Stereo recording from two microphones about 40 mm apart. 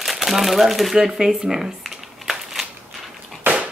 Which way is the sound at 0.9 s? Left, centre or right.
Centre.